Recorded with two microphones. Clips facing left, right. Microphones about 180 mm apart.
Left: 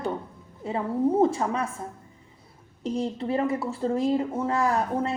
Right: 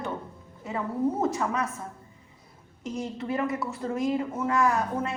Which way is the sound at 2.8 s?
30° left (ahead or behind).